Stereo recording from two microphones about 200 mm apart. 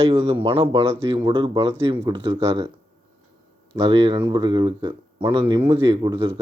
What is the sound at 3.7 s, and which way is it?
Speech, 25° right (ahead or behind).